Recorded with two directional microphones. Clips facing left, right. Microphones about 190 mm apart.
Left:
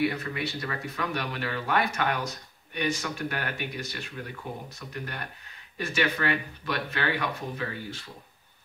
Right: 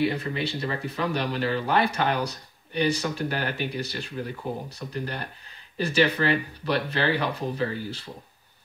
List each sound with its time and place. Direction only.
0.0 s speech: 30° right (ahead or behind)